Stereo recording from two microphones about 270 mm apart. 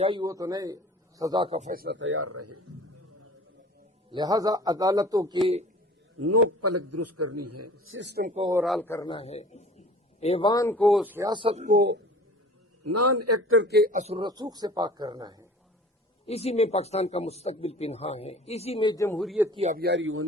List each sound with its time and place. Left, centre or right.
0.0 s a man's voice: centre; by 2.6 s right
4.1 s speech: centre
6.1 s a man's voice: right
7.9 s a man's voice: right
8.4 s speech: centre
8.6 s speech: centre; by 11.9 s right
12.8 s a man's voice: right
13.6 s speech: right; by 15.4 s centre
16.2 s speech: left; by 19.5 s centre
19.5 s a man's voice: right